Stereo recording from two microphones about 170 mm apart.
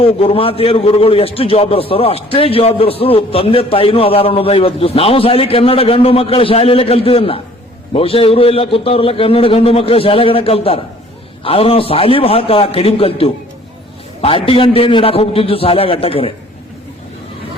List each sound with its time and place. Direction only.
0.0 s a man's voice: 35° left (ahead or behind)